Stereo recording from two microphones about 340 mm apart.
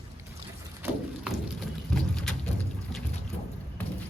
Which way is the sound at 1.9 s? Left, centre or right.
Centre.